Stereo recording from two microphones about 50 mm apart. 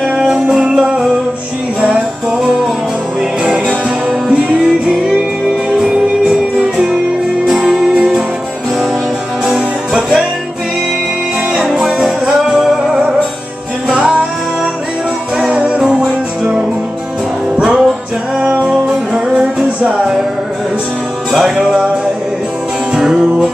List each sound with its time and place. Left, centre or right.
0.1 s music: centre
2.3 s music: centre
4.6 s music: centre
7.6 s music: centre
9.5 s music: centre
12.0 s music: centre
13.8 s music: centre
15.3 s music: right
17.6 s music: centre
18.4 s music: right
18.7 s music: centre
21.3 s music: centre
21.5 s music: centre